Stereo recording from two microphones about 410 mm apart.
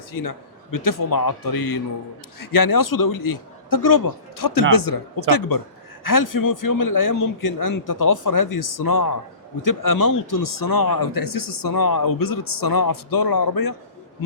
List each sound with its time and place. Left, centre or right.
0.1 s speech: left